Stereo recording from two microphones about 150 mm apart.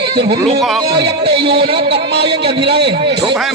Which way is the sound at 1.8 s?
90° right.